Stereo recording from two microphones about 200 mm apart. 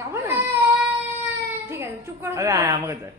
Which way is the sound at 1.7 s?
15° right (ahead or behind).